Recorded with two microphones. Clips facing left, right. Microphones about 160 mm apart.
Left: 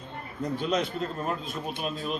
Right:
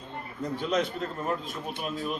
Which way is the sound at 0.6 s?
20° left (ahead or behind).